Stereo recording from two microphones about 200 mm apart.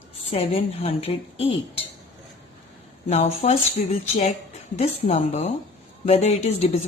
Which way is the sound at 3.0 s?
35° left (ahead or behind).